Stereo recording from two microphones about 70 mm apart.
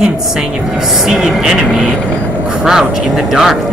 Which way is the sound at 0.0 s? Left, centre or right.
Centre.